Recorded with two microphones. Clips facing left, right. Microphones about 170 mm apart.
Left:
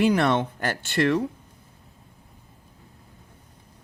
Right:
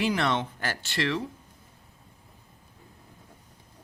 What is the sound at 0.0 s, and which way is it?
Speech, 50° left (ahead or behind).